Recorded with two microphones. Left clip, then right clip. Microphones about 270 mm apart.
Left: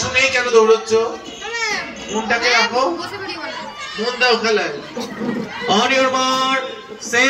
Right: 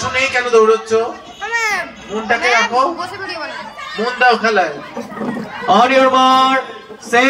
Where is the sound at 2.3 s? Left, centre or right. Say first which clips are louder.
Right 2 dB; centre.